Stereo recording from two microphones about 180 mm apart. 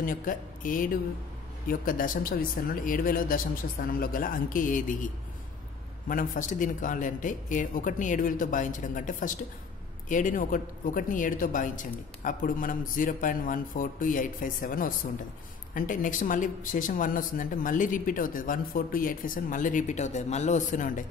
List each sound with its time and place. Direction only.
0.0 s speech: 50° left (ahead or behind)